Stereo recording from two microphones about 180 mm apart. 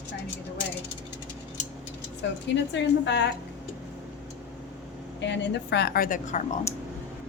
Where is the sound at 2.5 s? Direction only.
80° left.